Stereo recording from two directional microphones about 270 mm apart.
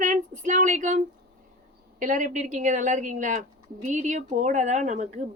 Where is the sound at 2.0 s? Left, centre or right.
Right.